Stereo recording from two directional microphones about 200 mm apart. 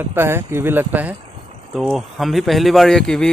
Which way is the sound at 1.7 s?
Centre (ahead or behind).